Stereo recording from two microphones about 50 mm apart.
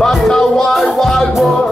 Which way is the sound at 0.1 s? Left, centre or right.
Centre.